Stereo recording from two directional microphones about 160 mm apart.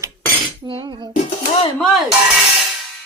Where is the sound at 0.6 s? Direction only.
30° right (ahead or behind).